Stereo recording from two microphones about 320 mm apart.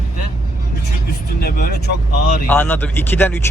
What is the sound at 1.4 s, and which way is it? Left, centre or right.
Speech, left.